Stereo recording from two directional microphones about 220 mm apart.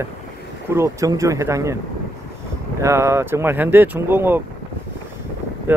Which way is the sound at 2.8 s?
10° right (ahead or behind).